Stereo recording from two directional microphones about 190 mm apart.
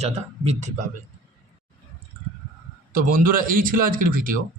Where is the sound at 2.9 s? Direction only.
45° right (ahead or behind).